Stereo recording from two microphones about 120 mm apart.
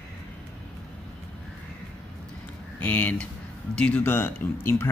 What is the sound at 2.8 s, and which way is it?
Speech, 15° left (ahead or behind).